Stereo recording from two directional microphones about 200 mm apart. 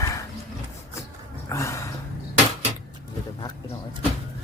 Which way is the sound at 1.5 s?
15° left (ahead or behind).